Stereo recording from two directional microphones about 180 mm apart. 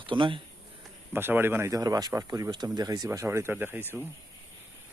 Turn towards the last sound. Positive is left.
turn(degrees=-10)  # may be behind; listen again after turning